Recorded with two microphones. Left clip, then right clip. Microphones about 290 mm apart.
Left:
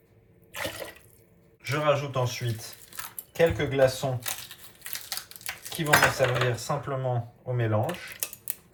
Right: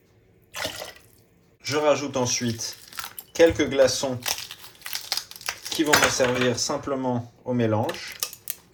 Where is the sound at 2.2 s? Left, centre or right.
Right.